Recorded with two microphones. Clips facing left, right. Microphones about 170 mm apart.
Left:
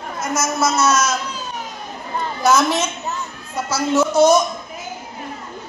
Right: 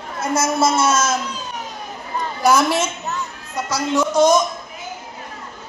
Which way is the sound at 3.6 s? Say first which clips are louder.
Left 2 dB; 5° left (ahead or behind).